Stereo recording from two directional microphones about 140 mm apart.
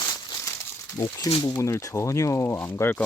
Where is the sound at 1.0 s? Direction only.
15° left (ahead or behind).